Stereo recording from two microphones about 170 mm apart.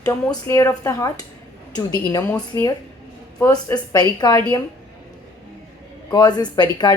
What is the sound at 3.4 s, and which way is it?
A woman's voice, 20° left (ahead or behind).